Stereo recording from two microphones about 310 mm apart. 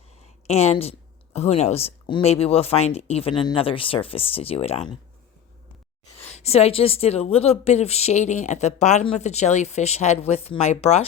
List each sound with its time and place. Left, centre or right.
0.2 s speech: centre
6.3 s speech: centre